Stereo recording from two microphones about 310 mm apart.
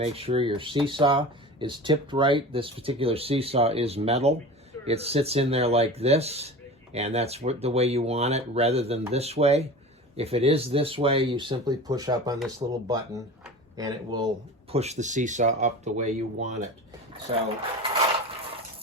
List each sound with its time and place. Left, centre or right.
0.0 s speech: centre
13.4 s a sound: centre
14.7 s speech: right